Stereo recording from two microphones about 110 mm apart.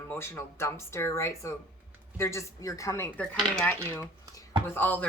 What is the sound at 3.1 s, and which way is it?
Speech, 15° left (ahead or behind).